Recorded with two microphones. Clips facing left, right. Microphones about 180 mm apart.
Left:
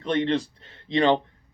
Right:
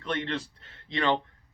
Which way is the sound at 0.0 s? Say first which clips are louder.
Left 8 dB; 20° left (ahead or behind).